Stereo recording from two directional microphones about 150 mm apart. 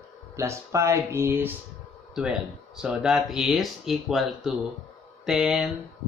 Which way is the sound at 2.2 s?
5° right (ahead or behind).